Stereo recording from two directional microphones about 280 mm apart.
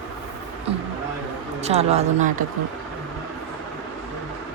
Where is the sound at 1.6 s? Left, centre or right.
Right.